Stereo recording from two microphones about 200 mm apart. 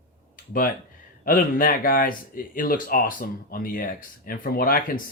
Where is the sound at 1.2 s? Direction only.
45° left (ahead or behind).